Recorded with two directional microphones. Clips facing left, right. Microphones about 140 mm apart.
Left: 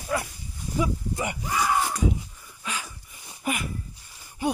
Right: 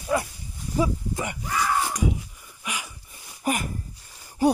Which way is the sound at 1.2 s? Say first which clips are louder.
Left 1 dB; 10° left (ahead or behind).